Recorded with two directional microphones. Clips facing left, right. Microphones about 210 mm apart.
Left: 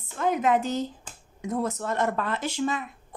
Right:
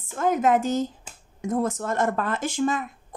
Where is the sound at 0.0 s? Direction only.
45° right (ahead or behind).